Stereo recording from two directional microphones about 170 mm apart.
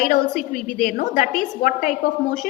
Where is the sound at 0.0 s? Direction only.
50° left (ahead or behind).